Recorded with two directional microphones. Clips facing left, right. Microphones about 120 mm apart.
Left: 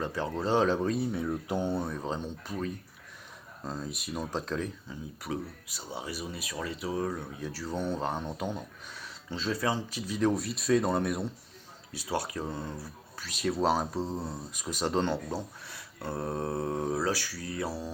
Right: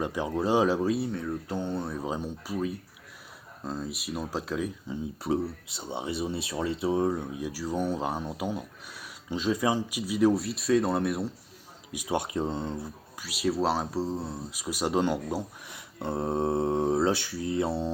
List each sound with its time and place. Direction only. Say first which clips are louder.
0.0 s speech: right 3 dB; 15° right (ahead or behind)
1.1 s speech: left 1 dB; 15° left (ahead or behind)
1.8 s speech: right 2 dB; 5° right (ahead or behind)
4.9 s speech: right 7 dB; 25° right (ahead or behind); by 11.3 s centre (ahead or behind)
11.9 s speech: right 3 dB; 15° right (ahead or behind)
13.2 s speech: right 1 dB; 5° right (ahead or behind); by 17.9 s 25° right (ahead or behind)